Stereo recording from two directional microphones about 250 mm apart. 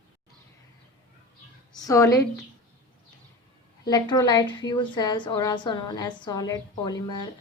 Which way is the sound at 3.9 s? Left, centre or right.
Centre.